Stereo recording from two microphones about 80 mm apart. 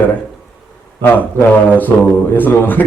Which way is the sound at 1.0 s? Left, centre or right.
Left.